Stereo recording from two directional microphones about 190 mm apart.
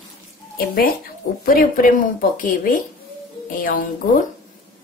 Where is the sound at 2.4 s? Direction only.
45° left (ahead or behind).